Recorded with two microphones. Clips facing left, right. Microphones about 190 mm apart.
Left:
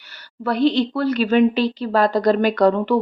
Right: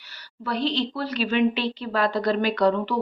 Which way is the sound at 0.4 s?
55° left (ahead or behind).